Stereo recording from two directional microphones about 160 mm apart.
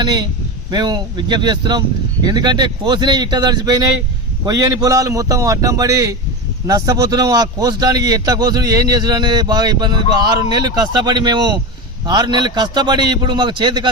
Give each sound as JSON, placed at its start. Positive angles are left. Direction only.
{"t": 0.0, "sound": "a man's voice", "side_deg": -25}